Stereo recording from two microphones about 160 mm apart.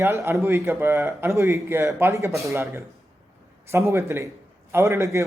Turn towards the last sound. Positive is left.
turn(degrees=-20)  # may be behind; listen again after turning